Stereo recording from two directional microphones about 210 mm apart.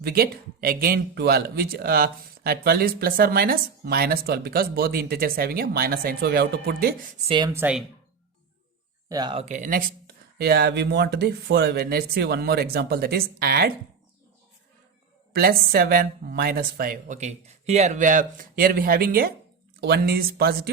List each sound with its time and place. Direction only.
0.0 s speech: 45° right (ahead or behind)
7.3 s speech: 20° right (ahead or behind)
7.5 s speech: 5° right (ahead or behind)
9.0 s speech: 20° right (ahead or behind); by 13.7 s 45° right (ahead or behind)
15.3 s speech: 45° right (ahead or behind)